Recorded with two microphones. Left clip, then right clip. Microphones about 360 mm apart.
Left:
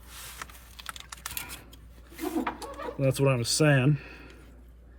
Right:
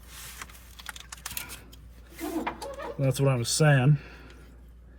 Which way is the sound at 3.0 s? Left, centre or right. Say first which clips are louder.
Left 2 dB; left.